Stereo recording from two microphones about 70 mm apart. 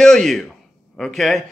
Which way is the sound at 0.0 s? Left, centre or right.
Centre.